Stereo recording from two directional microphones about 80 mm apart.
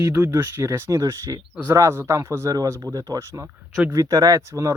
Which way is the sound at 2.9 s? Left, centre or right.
Right.